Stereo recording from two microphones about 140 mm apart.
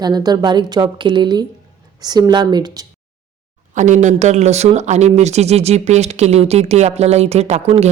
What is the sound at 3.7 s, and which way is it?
Speech, 60° right (ahead or behind).